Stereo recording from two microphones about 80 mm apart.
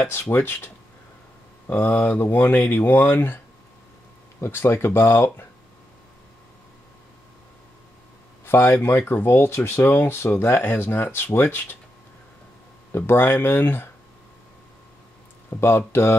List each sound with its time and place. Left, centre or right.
0.0 s speech: left
1.7 s speech: left
4.4 s speech: left
8.5 s speech: left
12.9 s speech: left
15.5 s speech: left